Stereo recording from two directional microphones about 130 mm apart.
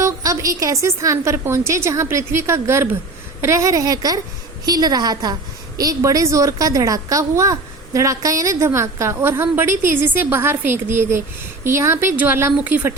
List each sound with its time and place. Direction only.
0.0 s a woman's voice: 25° right (ahead or behind)